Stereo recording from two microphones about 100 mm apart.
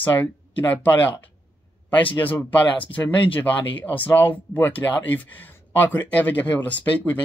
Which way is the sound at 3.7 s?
15° left (ahead or behind).